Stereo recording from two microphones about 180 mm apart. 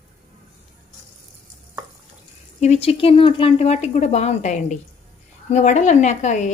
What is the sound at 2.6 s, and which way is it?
A woman's voice, 35° left (ahead or behind).